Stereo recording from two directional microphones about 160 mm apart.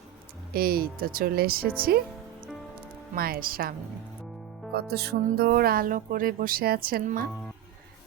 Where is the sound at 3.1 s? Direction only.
65° right (ahead or behind).